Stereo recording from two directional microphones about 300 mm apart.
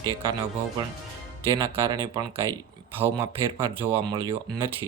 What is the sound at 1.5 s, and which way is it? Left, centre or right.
Speech, centre.